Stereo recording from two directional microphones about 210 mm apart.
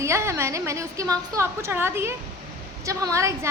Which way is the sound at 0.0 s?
15° right (ahead or behind).